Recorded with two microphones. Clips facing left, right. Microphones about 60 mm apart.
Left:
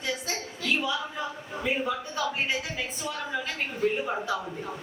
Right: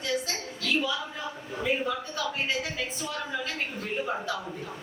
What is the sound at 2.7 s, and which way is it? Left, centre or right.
A woman's voice, centre.